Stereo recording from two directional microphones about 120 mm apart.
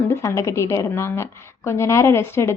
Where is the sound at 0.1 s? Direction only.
25° left (ahead or behind).